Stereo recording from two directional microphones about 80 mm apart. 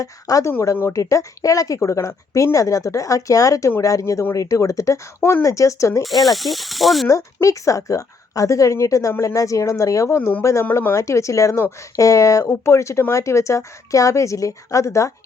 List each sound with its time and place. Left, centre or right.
0.0 s speech: left
6.0 s speech: centre
7.4 s speech: left
10.2 s speech: left
10.4 s speech: left